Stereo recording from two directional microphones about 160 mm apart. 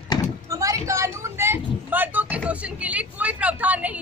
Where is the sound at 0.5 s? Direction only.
20° right (ahead or behind).